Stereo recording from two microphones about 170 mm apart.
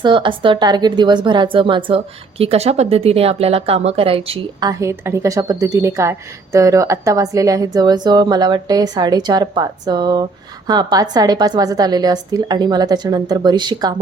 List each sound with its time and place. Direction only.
0.0 s a woman's voice: 30° right (ahead or behind)
4.7 s a woman's voice: 15° right (ahead or behind)